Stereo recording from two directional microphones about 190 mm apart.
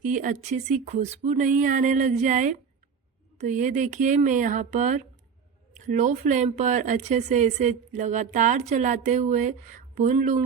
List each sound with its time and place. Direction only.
0.0 s speech: 40° right (ahead or behind)